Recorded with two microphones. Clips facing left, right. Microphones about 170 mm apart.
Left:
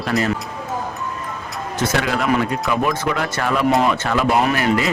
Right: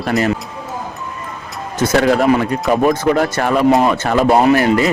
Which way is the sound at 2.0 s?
40° right (ahead or behind).